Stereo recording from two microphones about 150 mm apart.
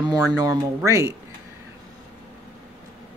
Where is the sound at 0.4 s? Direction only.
20° right (ahead or behind).